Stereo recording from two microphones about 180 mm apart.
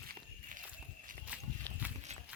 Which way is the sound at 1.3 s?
10° right (ahead or behind).